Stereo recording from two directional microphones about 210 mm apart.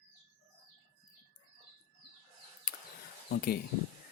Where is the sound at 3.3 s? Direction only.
45° left (ahead or behind).